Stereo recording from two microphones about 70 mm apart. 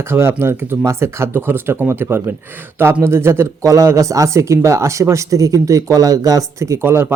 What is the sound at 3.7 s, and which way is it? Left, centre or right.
Speech, right.